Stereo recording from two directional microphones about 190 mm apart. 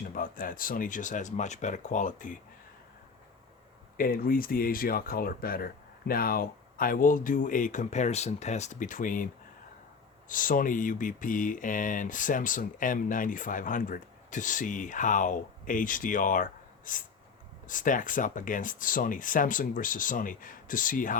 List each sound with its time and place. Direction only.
0.1 s speech: 45° left (ahead or behind)
3.9 s speech: 50° left (ahead or behind)